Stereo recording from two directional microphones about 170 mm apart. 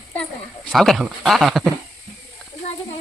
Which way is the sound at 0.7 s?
Centre (ahead or behind).